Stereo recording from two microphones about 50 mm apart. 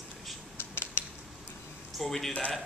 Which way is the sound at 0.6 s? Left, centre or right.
Left.